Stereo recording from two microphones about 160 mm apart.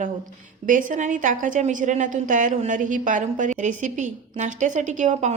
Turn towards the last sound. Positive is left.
turn(degrees=-50)  # may be behind; listen again after turning